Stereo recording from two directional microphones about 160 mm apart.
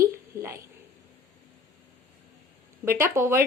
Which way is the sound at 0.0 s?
15° right (ahead or behind).